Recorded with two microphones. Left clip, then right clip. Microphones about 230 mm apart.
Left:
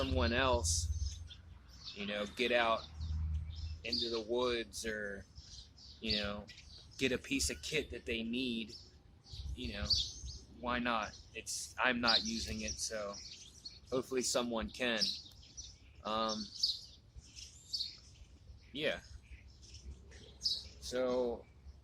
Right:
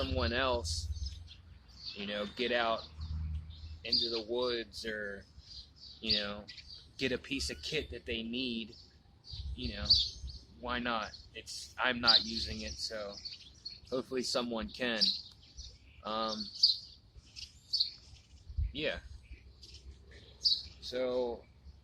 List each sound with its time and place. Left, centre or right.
0.0 s speech: centre
2.0 s speech: centre
3.8 s speech: centre
17.4 s chirp: right
18.7 s speech: centre
20.4 s a sound: right
20.8 s speech: centre